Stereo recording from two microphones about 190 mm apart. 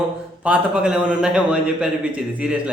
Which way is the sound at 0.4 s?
5° right (ahead or behind).